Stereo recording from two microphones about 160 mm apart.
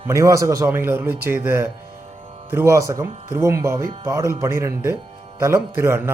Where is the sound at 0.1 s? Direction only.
20° right (ahead or behind).